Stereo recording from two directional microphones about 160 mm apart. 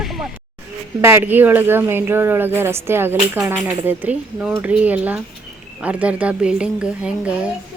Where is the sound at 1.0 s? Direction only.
15° right (ahead or behind).